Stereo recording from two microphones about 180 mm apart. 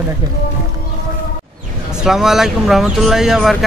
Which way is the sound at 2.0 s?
Centre (ahead or behind).